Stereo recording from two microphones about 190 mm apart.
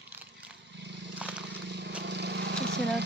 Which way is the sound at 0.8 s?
70° right (ahead or behind).